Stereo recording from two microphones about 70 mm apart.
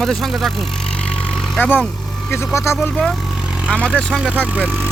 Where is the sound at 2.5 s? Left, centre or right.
Left.